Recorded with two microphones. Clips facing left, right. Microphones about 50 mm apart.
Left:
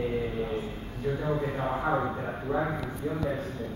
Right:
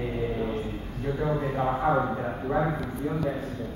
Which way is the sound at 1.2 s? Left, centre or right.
Centre.